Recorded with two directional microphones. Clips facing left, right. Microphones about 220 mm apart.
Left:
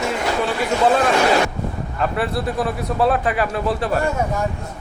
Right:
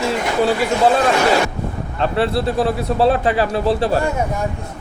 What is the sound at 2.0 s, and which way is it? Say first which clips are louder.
Speech: right 4 dB; 30° right (ahead or behind).